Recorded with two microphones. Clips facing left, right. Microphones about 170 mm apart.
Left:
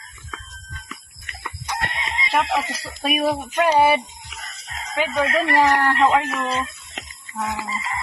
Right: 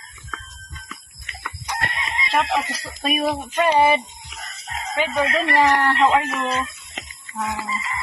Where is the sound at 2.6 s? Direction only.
10° left (ahead or behind).